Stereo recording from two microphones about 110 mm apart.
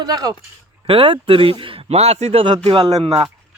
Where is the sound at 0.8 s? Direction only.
55° right (ahead or behind); by 2.5 s 75° right (ahead or behind).